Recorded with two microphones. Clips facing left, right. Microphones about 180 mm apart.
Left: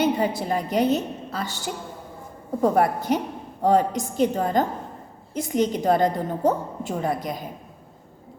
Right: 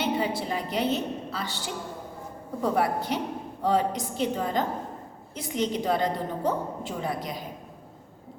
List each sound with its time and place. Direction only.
0.0 s a woman's voice: 45° left (ahead or behind)